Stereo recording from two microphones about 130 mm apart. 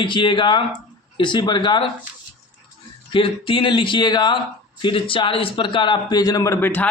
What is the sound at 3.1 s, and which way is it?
A man's voice, 40° left (ahead or behind).